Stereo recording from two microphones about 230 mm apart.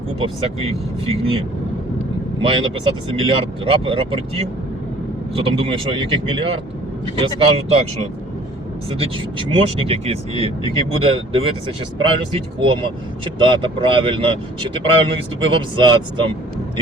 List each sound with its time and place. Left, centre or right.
0.4 s speech: right
2.4 s speech: right
9.0 s speech: right